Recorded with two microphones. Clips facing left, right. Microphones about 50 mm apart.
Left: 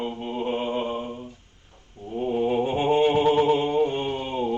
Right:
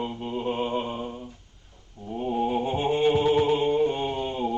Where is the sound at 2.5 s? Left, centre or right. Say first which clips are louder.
Left 3 dB; left.